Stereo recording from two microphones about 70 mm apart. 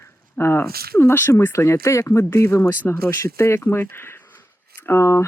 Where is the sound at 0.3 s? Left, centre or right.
Left.